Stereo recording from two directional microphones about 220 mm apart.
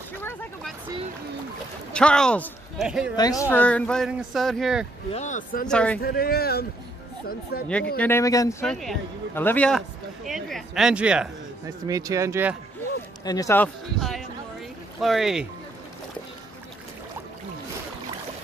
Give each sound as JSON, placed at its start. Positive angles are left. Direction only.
{"t": 0.2, "sound": "a sound", "side_deg": 10}
{"t": 1.9, "sound": "speech", "side_deg": 5}
{"t": 3.2, "sound": "speech", "side_deg": 15}
{"t": 5.1, "sound": "speech", "side_deg": 35}
{"t": 5.7, "sound": "speech", "side_deg": 5}
{"t": 5.9, "sound": "speech", "side_deg": 45}
{"t": 8.0, "sound": "a man's voice", "side_deg": 10}
{"t": 8.6, "sound": "speech", "side_deg": 0}
{"t": 11.9, "sound": "speech", "side_deg": -15}
{"t": 13.2, "sound": "a man's voice", "side_deg": 15}